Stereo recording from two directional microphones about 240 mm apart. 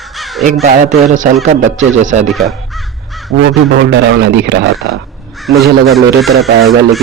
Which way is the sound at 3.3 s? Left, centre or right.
Right.